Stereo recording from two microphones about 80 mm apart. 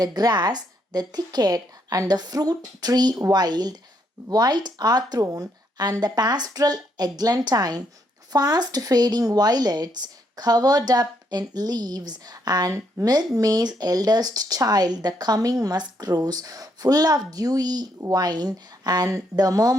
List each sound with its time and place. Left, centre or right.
0.0 s speech: right
5.2 s speech: right